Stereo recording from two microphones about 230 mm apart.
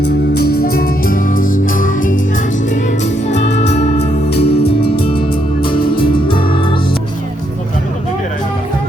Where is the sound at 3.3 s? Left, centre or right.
Left.